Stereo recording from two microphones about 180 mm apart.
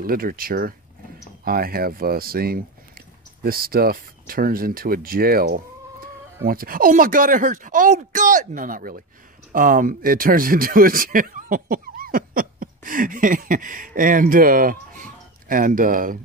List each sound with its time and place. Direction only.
0.0 s speech: 55° right (ahead or behind)